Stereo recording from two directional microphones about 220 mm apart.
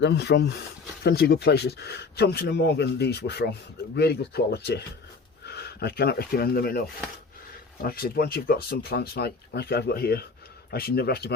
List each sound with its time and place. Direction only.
0.0 s speech: 50° left (ahead or behind)